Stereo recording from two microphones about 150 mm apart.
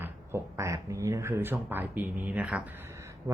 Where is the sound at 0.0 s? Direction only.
15° right (ahead or behind).